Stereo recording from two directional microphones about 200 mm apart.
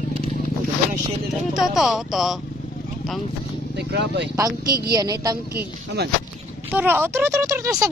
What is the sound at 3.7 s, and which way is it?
Speech, 60° right (ahead or behind).